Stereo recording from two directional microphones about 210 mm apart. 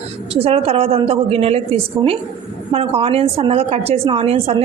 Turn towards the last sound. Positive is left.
turn(degrees=-25)  # may be behind; listen again after turning